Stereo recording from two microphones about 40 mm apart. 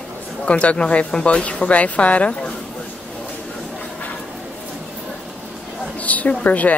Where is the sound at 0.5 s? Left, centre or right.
Left.